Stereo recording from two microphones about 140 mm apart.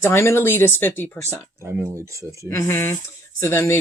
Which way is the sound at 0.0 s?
20° left (ahead or behind).